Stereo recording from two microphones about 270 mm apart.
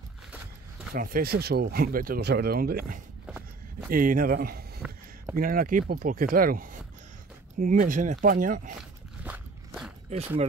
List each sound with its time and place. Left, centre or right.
0.9 s speech: right
3.3 s walk: centre
3.9 s speech: right
9.2 s a sound: centre
10.0 s speech: right